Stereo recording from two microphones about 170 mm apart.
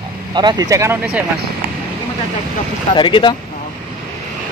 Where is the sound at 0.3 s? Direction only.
25° right (ahead or behind).